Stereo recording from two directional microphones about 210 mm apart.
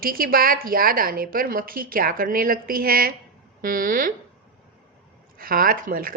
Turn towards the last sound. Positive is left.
turn(degrees=-45)  # may be behind; listen again after turning